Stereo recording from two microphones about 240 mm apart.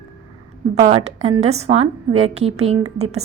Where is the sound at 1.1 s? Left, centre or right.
Right.